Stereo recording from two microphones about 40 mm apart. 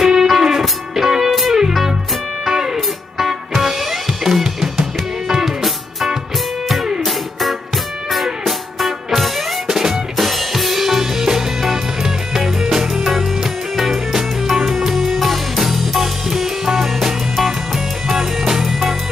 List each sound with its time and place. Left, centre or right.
0.0 s music: centre
9.7 s drum kit: centre
11.2 s music: centre